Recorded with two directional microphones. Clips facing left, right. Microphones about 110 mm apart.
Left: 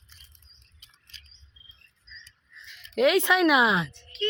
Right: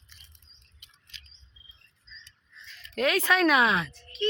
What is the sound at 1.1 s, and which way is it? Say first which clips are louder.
Bird: right 2 dB; 40° left (ahead or behind).